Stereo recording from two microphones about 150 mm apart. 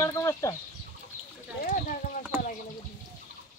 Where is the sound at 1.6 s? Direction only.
60° left (ahead or behind).